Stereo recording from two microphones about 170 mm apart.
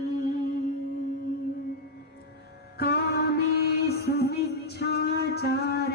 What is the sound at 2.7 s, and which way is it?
Music, 70° left (ahead or behind).